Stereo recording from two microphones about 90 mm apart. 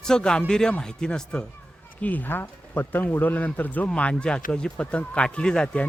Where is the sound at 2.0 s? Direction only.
20° left (ahead or behind).